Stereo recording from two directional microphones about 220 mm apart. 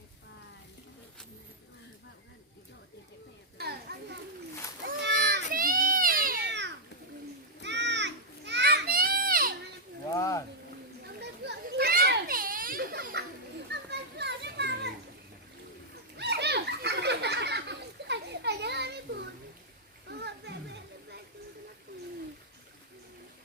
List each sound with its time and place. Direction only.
3.6 s children playing: 45° right (ahead or behind)
4.8 s cat: 50° right (ahead or behind)
7.6 s children playing: 50° right (ahead or behind)
10.1 s a sound: 15° left (ahead or behind)
11.2 s children playing: 50° right (ahead or behind)
16.1 s a sound: 50° right (ahead or behind)
20.1 s children playing: 50° right (ahead or behind)